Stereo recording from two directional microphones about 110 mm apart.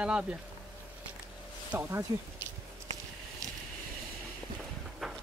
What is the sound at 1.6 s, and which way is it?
Speech, 20° right (ahead or behind).